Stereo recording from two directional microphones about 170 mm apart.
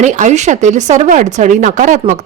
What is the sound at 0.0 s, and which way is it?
Speech, 45° right (ahead or behind).